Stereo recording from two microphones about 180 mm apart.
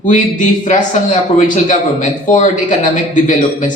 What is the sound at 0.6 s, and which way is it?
Speech, 40° left (ahead or behind).